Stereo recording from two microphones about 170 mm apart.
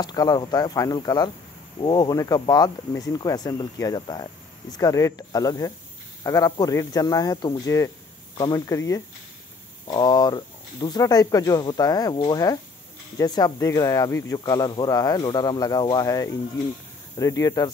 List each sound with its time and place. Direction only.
0.0 s speech: 20° left (ahead or behind)
13.2 s speech: 20° left (ahead or behind)